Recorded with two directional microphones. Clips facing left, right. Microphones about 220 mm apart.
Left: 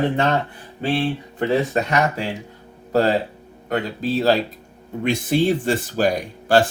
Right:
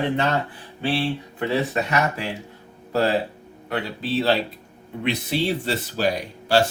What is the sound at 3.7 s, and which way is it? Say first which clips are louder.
Speech: left 3 dB; 45° left (ahead or behind).